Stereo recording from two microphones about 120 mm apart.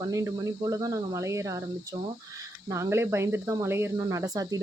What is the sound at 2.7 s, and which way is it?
Speech, 20° right (ahead or behind).